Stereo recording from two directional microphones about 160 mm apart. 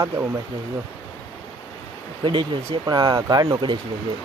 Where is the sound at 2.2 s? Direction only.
30° right (ahead or behind).